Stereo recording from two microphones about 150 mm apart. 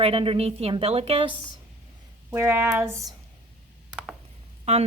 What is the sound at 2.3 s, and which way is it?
Speech, 15° right (ahead or behind).